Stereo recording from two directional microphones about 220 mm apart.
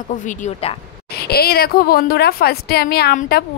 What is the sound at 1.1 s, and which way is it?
A woman's voice, 45° left (ahead or behind).